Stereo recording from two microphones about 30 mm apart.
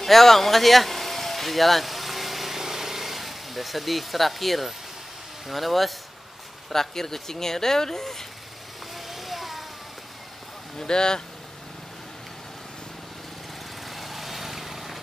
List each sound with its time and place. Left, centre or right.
0.0 s vehicle: centre
5.5 s speech: centre
6.7 s speech: centre
8.9 s vehicle: centre
10.8 s speech: left
13.8 s vehicle: centre